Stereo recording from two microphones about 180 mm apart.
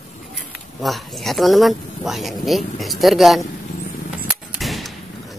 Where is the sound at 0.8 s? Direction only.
Centre (ahead or behind).